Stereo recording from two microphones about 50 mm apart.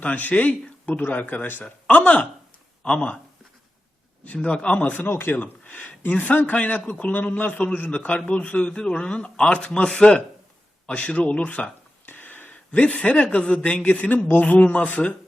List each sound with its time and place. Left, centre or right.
0.0 s speech: left
1.6 s a man's voice: left
4.4 s a man's voice: left
4.9 s a man's voice: left
10.8 s a sound: left
12.7 s a man's voice: left